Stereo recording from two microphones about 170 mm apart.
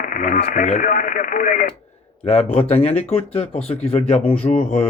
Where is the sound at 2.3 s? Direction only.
40° left (ahead or behind).